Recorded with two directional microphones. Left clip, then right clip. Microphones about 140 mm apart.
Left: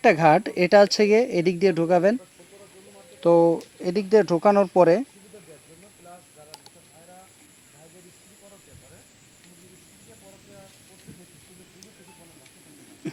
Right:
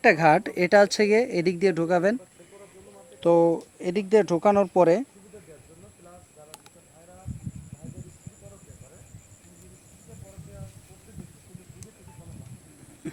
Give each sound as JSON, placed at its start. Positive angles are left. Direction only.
{"t": 0.0, "sound": "speech", "side_deg": 40}
{"t": 3.2, "sound": "speech", "side_deg": 35}